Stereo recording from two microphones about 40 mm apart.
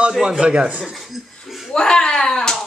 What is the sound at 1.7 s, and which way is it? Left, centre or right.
Speech, centre.